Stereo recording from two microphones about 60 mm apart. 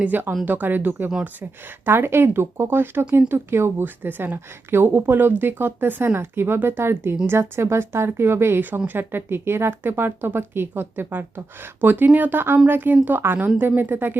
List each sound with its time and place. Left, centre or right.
0.0 s speech: right
3.8 s speech: right